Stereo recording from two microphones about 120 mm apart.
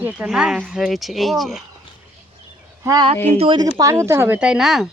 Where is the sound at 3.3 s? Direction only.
50° right (ahead or behind).